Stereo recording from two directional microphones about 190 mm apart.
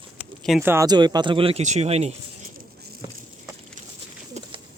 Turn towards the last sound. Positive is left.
turn(degrees=-35)  # may be behind; listen again after turning